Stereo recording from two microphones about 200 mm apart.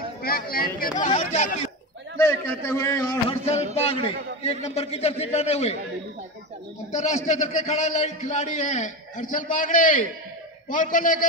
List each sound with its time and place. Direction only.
0.2 s speech: 50° left (ahead or behind)
1.0 s a man's voice: 35° left (ahead or behind)
2.2 s a man's voice: 15° left (ahead or behind)
3.3 s a man's voice: 30° left (ahead or behind)
6.9 s a man's voice: 35° left (ahead or behind)